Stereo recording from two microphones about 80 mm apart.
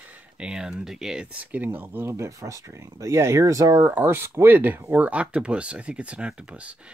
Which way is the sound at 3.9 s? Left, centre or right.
Right.